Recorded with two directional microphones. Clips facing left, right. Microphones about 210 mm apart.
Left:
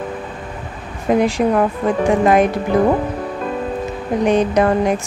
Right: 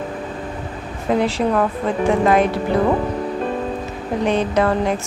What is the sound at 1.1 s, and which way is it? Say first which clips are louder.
Speech: left 3 dB; 15° left (ahead or behind).